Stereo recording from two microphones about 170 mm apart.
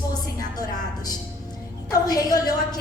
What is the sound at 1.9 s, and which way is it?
Speech, 20° left (ahead or behind).